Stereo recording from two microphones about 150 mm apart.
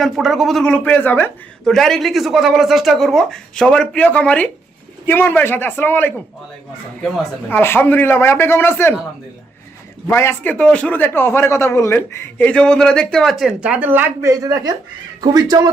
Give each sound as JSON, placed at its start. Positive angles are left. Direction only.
{"t": 0.0, "sound": "a man's voice", "side_deg": 0}
{"t": 1.6, "sound": "a man's voice", "side_deg": 0}
{"t": 7.4, "sound": "a man's voice", "side_deg": 15}
{"t": 10.1, "sound": "a man's voice", "side_deg": 15}
{"t": 13.4, "sound": "speech", "side_deg": -5}